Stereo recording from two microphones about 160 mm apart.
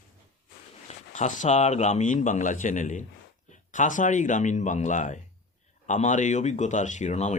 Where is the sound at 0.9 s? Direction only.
50° left (ahead or behind).